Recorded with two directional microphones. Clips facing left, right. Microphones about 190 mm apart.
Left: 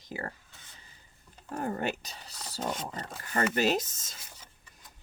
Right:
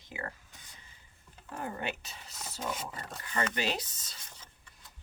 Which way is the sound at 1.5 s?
45° left (ahead or behind).